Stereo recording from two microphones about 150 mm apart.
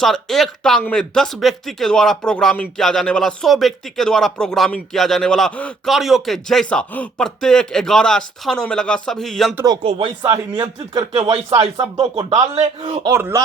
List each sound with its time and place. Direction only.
0.0 s speech: centre (ahead or behind)
10.2 s speech: 25° right (ahead or behind)
11.3 s speech: 40° right (ahead or behind)
13.1 s speech: 20° right (ahead or behind)